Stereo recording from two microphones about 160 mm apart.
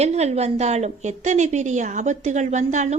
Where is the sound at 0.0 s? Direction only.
45° right (ahead or behind).